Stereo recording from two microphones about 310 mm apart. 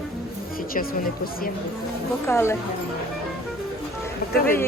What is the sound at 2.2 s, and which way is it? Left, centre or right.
Speech, centre.